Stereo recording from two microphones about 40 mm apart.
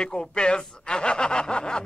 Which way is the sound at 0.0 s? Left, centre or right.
Left.